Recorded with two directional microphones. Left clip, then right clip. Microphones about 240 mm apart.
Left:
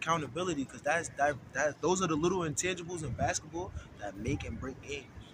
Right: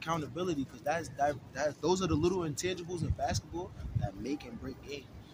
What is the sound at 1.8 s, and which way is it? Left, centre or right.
Speech, centre.